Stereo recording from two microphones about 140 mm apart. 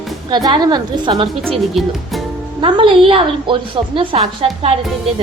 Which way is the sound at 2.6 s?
35° right (ahead or behind).